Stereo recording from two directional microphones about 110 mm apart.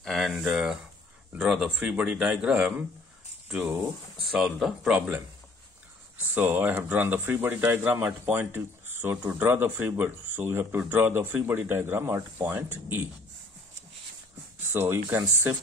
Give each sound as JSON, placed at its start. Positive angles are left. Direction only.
{"t": 0.0, "sound": "a man's voice", "side_deg": 0}
{"t": 14.6, "sound": "speech", "side_deg": -20}